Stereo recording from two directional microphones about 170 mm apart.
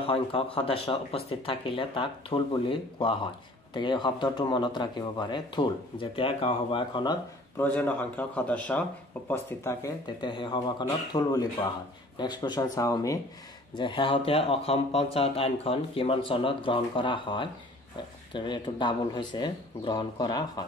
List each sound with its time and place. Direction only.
0.0 s speech: 35° left (ahead or behind)
7.5 s speech: 10° left (ahead or behind)
10.3 s speech: 30° left (ahead or behind)